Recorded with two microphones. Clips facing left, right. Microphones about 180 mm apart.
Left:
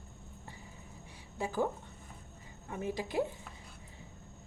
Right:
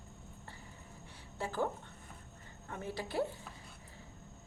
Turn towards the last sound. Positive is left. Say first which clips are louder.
# left 3 dB
turn(degrees=15)  # may be behind; listen again after turning